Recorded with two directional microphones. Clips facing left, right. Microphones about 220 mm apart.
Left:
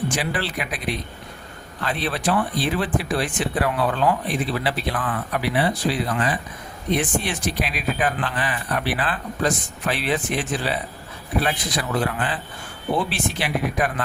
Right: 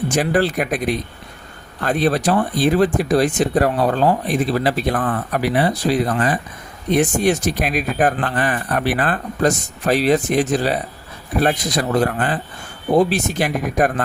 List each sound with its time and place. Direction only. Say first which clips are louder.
0.1 s speech: right 8 dB; 45° right (ahead or behind)